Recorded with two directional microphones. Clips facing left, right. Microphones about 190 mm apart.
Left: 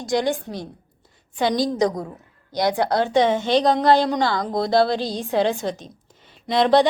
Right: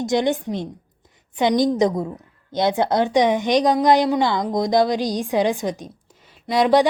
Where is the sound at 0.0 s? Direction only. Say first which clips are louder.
Right 2 dB; 20° right (ahead or behind).